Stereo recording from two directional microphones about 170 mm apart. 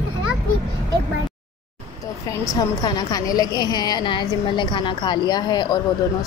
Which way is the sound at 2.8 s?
25° left (ahead or behind).